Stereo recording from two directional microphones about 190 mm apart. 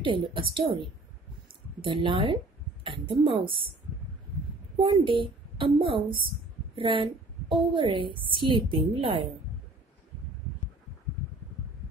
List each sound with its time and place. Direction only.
0.0 s a woman's voice: 25° right (ahead or behind)
4.7 s a woman's voice: 25° right (ahead or behind)